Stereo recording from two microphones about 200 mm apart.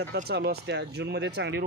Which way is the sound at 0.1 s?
55° right (ahead or behind).